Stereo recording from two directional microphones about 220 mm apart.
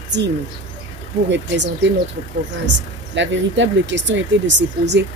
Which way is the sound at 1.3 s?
55° right (ahead or behind).